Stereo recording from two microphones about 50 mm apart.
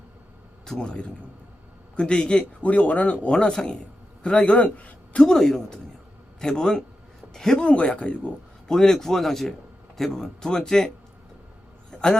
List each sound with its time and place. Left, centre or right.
0.6 s a man's voice: centre
2.6 s a man's voice: left
5.2 s a man's voice: centre
7.7 s a man's voice: left
8.6 s a man's voice: centre
11.9 s a sound: centre